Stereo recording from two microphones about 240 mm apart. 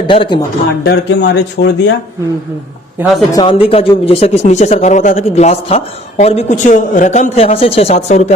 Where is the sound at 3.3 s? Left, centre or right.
Centre.